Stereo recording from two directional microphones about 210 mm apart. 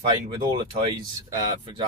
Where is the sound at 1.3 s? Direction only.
25° right (ahead or behind).